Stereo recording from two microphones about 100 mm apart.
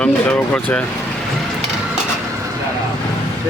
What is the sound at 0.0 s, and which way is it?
Speech, 15° left (ahead or behind).